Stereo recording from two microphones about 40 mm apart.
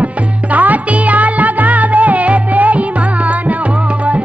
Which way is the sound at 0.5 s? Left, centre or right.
Right.